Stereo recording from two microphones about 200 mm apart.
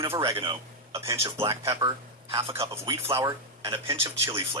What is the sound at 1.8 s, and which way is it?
Speech, 25° right (ahead or behind).